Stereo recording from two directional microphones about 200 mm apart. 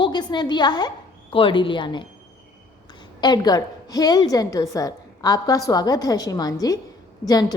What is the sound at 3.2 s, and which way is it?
A woman's voice, 20° left (ahead or behind).